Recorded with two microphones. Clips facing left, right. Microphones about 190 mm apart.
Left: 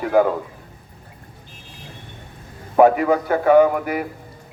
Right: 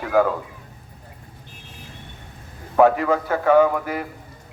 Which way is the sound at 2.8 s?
15° left (ahead or behind).